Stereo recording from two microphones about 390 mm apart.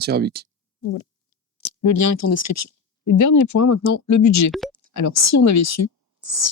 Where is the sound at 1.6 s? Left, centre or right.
Left.